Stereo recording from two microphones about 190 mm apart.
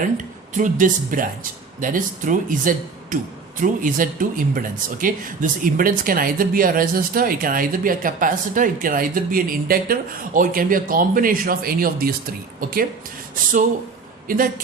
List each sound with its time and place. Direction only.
0.5 s speech: 45° right (ahead or behind)
13.3 s speech: 45° right (ahead or behind)